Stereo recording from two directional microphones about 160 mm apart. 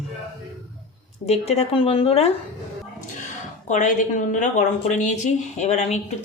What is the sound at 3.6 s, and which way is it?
A woman's voice, 50° left (ahead or behind).